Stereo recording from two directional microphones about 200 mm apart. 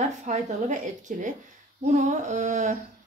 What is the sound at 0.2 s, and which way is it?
Speech, 35° right (ahead or behind).